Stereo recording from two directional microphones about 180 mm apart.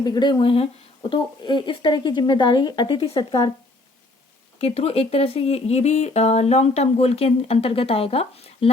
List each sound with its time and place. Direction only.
0.0 s speech: 25° left (ahead or behind)
4.5 s speech: 35° left (ahead or behind)